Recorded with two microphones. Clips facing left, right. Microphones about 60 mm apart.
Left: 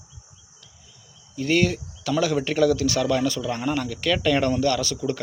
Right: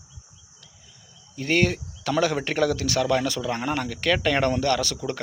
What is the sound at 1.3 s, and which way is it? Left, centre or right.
Speech, right.